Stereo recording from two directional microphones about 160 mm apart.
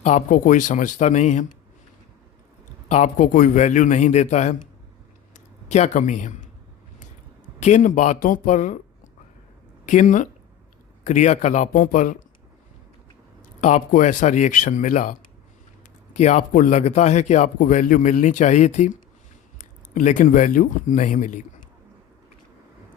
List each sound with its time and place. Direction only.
0.0 s a man's voice: 50° left (ahead or behind)
2.9 s a man's voice: 50° left (ahead or behind)
5.6 s a man's voice: 45° left (ahead or behind)
7.6 s a man's voice: 50° left (ahead or behind)
9.8 s a man's voice: 50° left (ahead or behind)
13.6 s a man's voice: 50° left (ahead or behind)
16.1 s a man's voice: 45° left (ahead or behind)